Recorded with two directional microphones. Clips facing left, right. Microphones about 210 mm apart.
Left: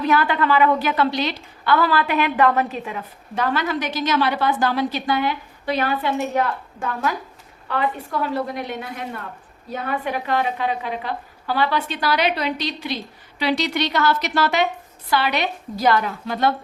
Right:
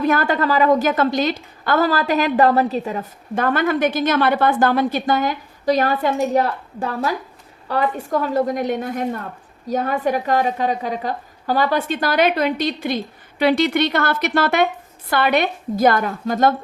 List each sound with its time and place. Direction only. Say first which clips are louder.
0.0 s a woman's voice: right 2 dB; 45° right (ahead or behind)